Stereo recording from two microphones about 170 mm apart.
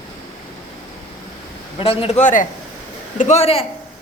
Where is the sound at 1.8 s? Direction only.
35° left (ahead or behind).